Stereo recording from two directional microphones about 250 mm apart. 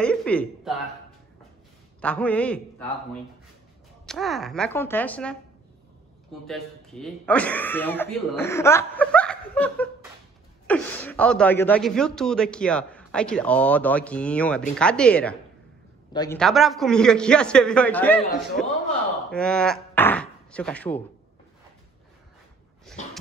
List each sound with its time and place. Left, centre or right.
0.0 s a sound: centre
2.0 s a man's voice: centre
4.0 s speech: centre
6.4 s speech: centre
16.1 s a man's voice: centre
16.3 s speech: centre